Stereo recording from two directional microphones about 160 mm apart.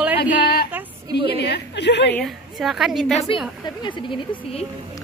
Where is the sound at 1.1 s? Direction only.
90° left.